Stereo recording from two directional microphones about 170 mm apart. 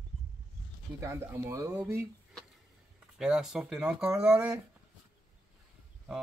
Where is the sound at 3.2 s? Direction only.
5° right (ahead or behind).